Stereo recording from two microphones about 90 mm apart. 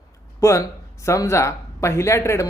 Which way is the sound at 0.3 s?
35° left (ahead or behind).